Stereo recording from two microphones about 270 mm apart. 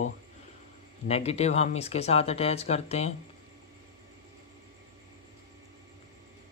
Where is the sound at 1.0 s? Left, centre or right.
Left.